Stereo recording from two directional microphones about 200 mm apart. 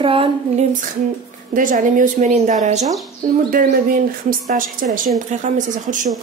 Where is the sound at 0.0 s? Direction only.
25° right (ahead or behind).